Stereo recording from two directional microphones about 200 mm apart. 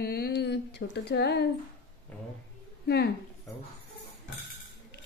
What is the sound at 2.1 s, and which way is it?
Speech, 5° left (ahead or behind).